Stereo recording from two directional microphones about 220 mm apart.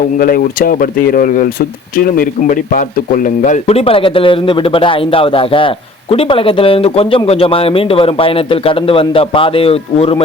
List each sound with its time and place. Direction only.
0.2 s speech: 40° left (ahead or behind); by 10.2 s 25° left (ahead or behind)